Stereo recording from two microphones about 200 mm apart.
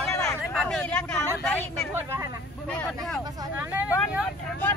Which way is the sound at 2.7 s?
5° left (ahead or behind).